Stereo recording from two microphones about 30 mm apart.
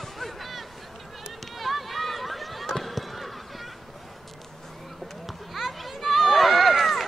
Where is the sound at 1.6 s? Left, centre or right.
Centre.